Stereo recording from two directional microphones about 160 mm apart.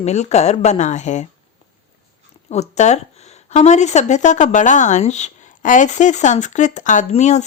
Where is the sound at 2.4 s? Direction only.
45° left (ahead or behind).